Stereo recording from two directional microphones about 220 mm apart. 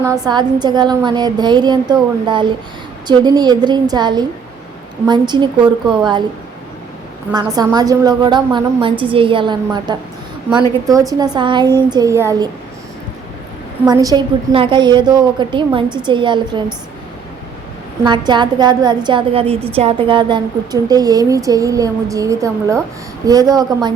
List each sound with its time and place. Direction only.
0.0 s a woman's voice: 15° right (ahead or behind)
7.5 s a woman's voice: 20° right (ahead or behind)
13.8 s a woman's voice: 15° right (ahead or behind)
18.0 s a woman's voice: 20° right (ahead or behind)